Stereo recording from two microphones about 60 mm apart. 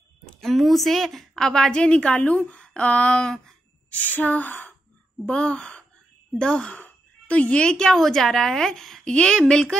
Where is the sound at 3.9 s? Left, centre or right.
Left.